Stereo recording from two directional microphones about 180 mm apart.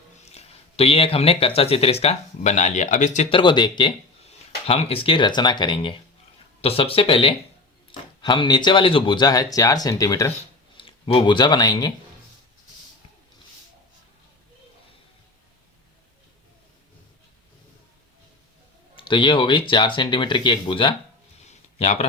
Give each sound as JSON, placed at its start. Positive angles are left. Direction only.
{"t": 0.2, "sound": "speech", "side_deg": 35}
{"t": 10.8, "sound": "speech", "side_deg": 30}
{"t": 18.9, "sound": "speech", "side_deg": 25}
{"t": 21.4, "sound": "a sound", "side_deg": 35}